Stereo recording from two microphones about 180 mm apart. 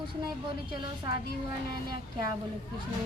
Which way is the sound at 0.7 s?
25° right (ahead or behind).